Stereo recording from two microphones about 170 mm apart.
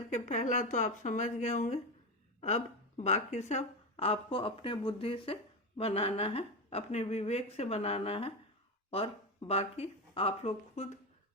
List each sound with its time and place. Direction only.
0.1 s a woman's voice: 45° left (ahead or behind)